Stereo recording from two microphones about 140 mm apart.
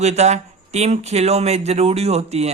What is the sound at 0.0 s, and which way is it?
Speech, 55° right (ahead or behind).